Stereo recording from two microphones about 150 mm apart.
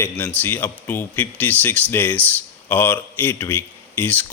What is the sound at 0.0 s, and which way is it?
Speech, 10° left (ahead or behind).